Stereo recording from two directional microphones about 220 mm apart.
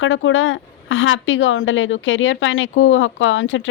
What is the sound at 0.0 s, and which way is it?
A woman's voice, 60° left (ahead or behind).